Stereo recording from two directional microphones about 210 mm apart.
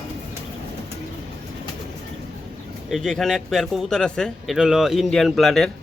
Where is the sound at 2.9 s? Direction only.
Centre (ahead or behind).